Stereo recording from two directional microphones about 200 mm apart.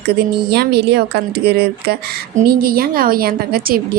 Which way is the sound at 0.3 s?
55° right (ahead or behind).